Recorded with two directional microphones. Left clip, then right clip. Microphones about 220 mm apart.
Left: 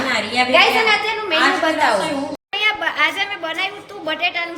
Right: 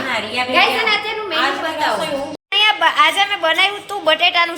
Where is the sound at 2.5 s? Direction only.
5° left (ahead or behind).